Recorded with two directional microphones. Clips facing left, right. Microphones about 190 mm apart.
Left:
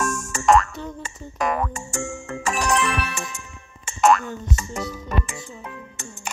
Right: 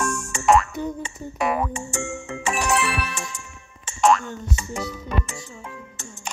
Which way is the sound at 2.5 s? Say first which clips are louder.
Left 1 dB; 5° right (ahead or behind).